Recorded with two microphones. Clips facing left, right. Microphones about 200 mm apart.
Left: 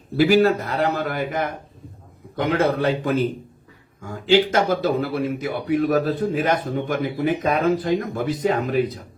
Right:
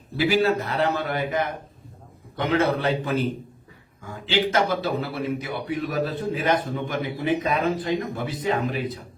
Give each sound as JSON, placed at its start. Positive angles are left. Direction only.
{"t": 0.2, "sound": "speech", "side_deg": 45}